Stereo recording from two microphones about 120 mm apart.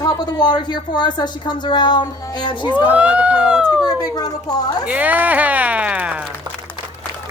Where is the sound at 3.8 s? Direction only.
35° left (ahead or behind).